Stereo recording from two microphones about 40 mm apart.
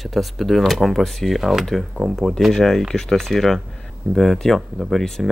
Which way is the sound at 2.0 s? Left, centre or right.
Left.